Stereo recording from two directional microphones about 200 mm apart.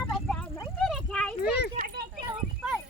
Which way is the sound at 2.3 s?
5° right (ahead or behind).